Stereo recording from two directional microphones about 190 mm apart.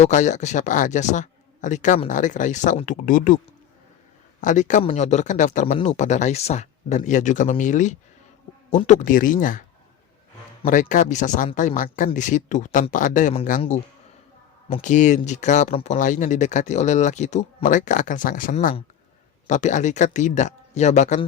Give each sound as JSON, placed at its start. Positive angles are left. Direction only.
{"t": 0.0, "sound": "speech", "side_deg": 40}
{"t": 10.7, "sound": "speech", "side_deg": 40}
{"t": 14.8, "sound": "speech", "side_deg": 40}